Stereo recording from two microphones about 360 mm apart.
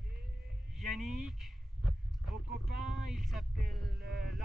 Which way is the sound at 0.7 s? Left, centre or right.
Centre.